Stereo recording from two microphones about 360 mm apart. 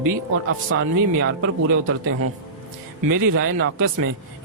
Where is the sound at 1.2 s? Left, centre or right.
Right.